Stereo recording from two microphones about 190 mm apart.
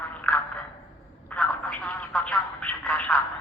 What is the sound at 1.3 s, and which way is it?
Telephone, 5° left (ahead or behind).